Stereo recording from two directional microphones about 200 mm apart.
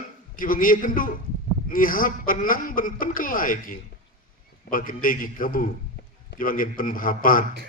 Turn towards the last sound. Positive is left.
turn(degrees=45)  # may be behind; listen again after turning